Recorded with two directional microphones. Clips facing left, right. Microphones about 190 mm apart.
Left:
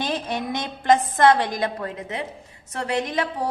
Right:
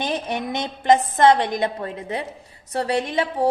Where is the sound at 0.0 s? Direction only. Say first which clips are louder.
Right 1 dB; 20° right (ahead or behind).